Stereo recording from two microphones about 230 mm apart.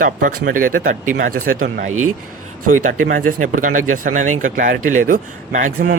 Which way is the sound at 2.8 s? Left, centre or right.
Right.